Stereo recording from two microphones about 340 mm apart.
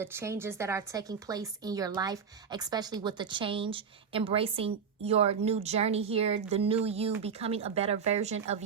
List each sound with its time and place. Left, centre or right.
0.0 s a woman's voice: centre